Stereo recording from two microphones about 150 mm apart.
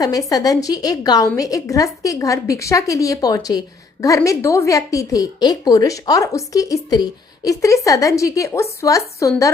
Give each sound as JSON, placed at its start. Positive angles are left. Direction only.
{"t": 0.0, "sound": "a woman's voice", "side_deg": 25}